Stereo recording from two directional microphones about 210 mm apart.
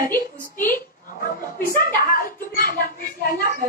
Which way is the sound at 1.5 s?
45° left (ahead or behind).